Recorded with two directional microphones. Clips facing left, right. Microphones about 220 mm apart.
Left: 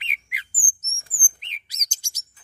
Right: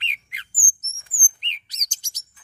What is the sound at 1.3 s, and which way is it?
Chirp, 10° left (ahead or behind).